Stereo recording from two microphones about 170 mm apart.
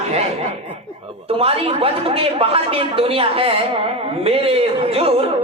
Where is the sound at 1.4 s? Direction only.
35° right (ahead or behind).